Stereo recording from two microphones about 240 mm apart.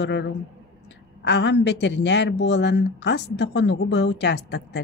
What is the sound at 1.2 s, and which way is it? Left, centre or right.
A woman's voice, left.